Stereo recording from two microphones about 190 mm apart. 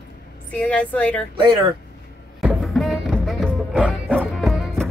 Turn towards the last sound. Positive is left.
turn(degrees=0)  # may be behind; listen again after turning